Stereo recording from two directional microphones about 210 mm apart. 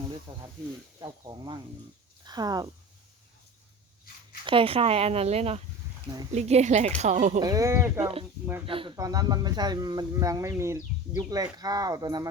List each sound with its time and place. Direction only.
0.3 s speech: 25° right (ahead or behind)
4.4 s speech: 25° right (ahead or behind)
7.3 s speech: 15° right (ahead or behind)
8.6 s speech: 25° right (ahead or behind)